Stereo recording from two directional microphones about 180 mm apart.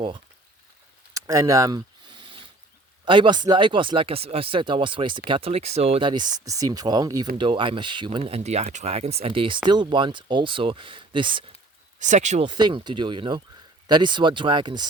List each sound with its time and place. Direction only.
1.1 s a sound: 20° right (ahead or behind)
3.0 s speech: 25° right (ahead or behind)
11.9 s speech: 40° right (ahead or behind)
12.5 s speech: 25° right (ahead or behind)